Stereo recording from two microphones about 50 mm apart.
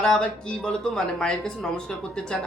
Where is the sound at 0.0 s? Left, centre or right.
Centre.